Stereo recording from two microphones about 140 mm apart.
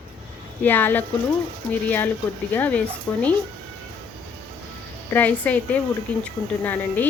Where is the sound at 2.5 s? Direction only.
10° left (ahead or behind).